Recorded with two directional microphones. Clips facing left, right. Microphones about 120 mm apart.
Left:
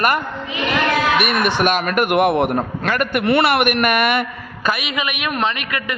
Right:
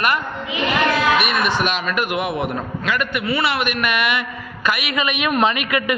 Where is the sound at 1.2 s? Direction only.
55° left (ahead or behind).